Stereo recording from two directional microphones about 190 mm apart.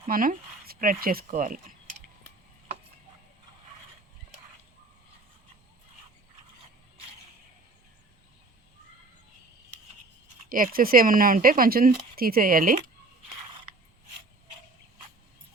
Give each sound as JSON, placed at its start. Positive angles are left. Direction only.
{"t": 0.1, "sound": "speech", "side_deg": -45}
{"t": 10.5, "sound": "speech", "side_deg": -45}